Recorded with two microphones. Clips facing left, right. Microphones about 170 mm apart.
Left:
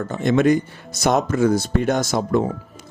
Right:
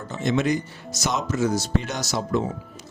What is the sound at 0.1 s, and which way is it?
Speech, 55° left (ahead or behind).